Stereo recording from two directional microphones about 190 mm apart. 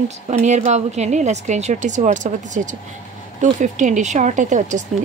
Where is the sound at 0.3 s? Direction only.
40° right (ahead or behind).